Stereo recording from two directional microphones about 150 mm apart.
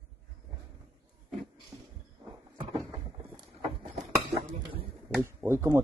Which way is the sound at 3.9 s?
50° right (ahead or behind).